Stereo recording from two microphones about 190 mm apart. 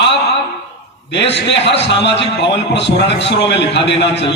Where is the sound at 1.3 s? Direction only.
65° left (ahead or behind).